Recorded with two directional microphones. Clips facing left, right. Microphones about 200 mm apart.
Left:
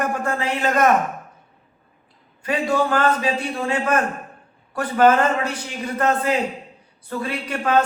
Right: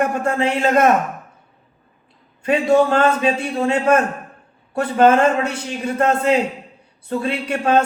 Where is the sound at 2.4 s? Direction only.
25° right (ahead or behind).